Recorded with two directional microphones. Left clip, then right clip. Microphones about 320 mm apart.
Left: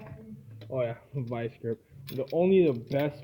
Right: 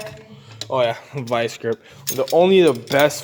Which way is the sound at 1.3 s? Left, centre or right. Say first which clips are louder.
Right 15 dB; centre.